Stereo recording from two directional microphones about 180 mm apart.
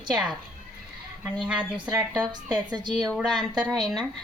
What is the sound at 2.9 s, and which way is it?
A woman's voice, centre (ahead or behind).